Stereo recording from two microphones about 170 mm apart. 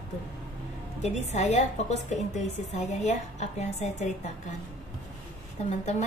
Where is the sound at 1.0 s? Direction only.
40° left (ahead or behind).